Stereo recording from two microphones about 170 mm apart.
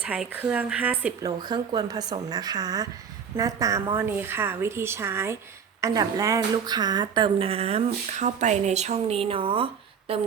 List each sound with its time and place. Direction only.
0.0 s a woman's voice: 10° right (ahead or behind)
1.2 s a woman's voice: 25° right (ahead or behind)